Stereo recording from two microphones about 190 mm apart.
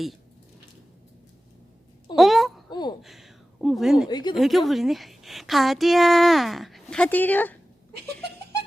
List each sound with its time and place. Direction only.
2.1 s wail: centre (ahead or behind)
2.6 s a sound: 25° left (ahead or behind)
3.0 s speech: centre (ahead or behind)
4.1 s speech: 20° left (ahead or behind)
4.4 s a woman's voice: centre (ahead or behind)